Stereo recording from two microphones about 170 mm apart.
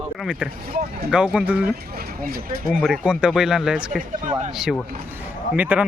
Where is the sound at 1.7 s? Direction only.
60° right (ahead or behind).